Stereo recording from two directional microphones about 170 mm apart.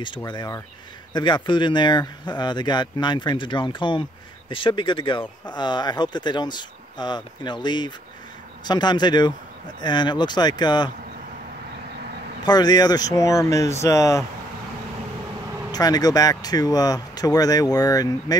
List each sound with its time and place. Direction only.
0.0 s speech: 25° left (ahead or behind)
12.4 s speech: 25° left (ahead or behind)
15.7 s speech: 20° left (ahead or behind)